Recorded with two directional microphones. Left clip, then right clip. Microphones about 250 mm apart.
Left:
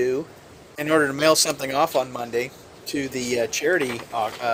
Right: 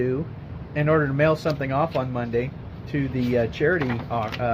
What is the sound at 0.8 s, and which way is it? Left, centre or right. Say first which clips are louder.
A man's voice: left 1 dB; left.